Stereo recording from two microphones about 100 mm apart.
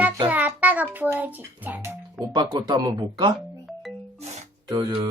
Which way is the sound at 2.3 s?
45° right (ahead or behind).